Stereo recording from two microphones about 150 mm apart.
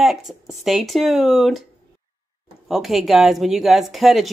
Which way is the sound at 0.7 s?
Centre (ahead or behind).